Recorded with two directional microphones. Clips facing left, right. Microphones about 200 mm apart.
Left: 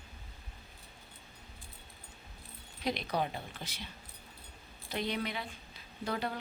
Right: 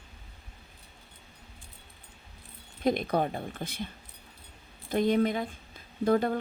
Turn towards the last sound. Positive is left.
turn(degrees=-50)  # may be behind; listen again after turning